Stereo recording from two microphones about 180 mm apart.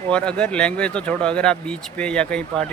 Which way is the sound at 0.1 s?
5° left (ahead or behind).